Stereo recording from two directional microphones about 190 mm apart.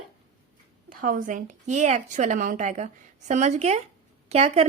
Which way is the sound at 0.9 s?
45° right (ahead or behind).